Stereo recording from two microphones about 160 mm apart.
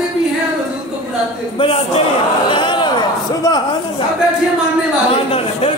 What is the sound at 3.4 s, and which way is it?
Speech, 25° left (ahead or behind).